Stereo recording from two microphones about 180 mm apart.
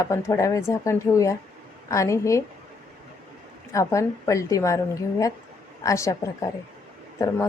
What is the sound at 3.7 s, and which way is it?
A woman's voice, 15° left (ahead or behind).